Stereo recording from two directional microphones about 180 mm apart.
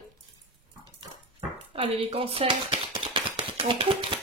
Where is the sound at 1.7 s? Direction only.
30° right (ahead or behind).